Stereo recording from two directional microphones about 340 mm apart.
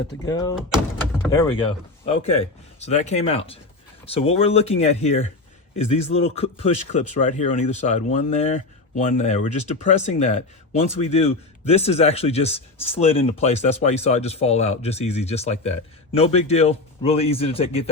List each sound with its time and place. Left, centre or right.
0.3 s speech: centre
2.0 s speech: centre